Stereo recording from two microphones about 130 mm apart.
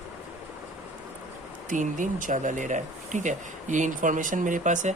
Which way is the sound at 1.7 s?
85° right.